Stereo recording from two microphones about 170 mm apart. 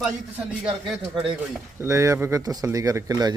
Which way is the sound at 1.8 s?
15° right (ahead or behind).